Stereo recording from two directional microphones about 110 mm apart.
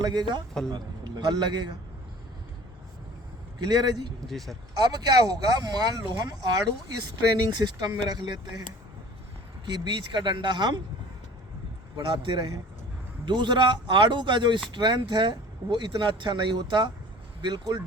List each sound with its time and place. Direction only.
0.0 s a man's voice: 40° right (ahead or behind)
3.6 s speech: 40° right (ahead or behind)
4.3 s speech: centre (ahead or behind)
4.8 s speech: 40° right (ahead or behind)
9.6 s speech: 45° right (ahead or behind)
11.9 s speech: 45° right (ahead or behind)